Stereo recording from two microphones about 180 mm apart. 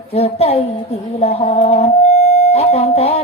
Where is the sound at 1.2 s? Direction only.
35° left (ahead or behind).